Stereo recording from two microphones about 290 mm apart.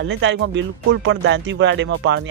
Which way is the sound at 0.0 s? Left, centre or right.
Right.